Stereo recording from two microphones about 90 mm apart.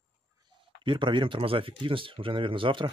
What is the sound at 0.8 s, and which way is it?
Speech, 65° right (ahead or behind).